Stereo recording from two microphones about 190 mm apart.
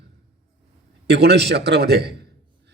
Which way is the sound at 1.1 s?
60° right (ahead or behind).